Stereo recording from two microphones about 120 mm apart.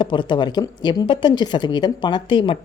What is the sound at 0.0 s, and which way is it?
Speech, 40° left (ahead or behind).